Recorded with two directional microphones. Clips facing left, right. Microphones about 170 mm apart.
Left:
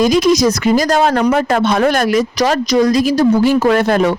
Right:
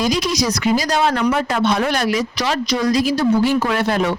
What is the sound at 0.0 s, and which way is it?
Speech, 50° left (ahead or behind).